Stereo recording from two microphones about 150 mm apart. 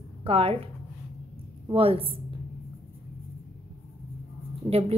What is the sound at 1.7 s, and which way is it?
Speech, 40° right (ahead or behind).